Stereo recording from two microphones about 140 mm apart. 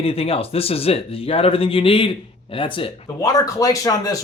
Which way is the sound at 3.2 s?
25° left (ahead or behind).